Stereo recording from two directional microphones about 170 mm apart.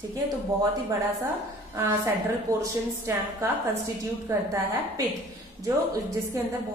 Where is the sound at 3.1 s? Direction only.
15° right (ahead or behind).